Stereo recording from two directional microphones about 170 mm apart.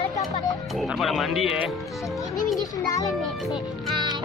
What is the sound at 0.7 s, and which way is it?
Speech, centre (ahead or behind).